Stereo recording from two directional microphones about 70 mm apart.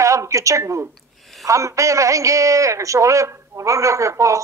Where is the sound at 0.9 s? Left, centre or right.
Centre.